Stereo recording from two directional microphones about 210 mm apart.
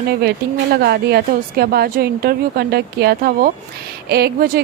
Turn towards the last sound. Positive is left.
turn(degrees=-50)  # may be behind; listen again after turning